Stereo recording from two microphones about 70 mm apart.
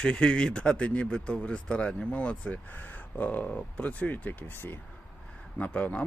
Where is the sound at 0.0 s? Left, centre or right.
Centre.